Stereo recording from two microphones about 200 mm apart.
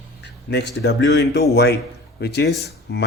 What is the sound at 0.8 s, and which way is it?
Speech, 60° left (ahead or behind).